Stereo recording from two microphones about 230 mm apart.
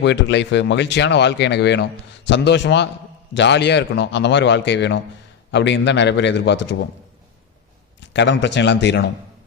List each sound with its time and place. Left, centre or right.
0.0 s speech: left
8.1 s speech: left